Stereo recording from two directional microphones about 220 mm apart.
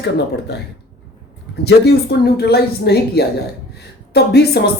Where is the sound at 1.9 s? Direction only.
50° left (ahead or behind).